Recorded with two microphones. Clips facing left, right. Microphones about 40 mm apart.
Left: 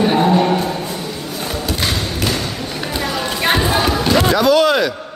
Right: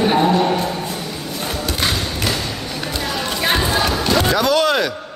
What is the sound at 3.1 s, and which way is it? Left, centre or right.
Music, centre.